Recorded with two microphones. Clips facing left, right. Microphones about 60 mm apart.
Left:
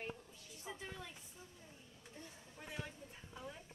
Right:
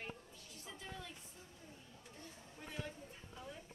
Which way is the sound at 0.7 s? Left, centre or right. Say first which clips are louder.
Left 2 dB; centre.